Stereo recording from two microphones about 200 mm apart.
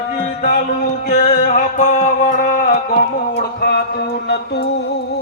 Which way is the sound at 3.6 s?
55° left (ahead or behind).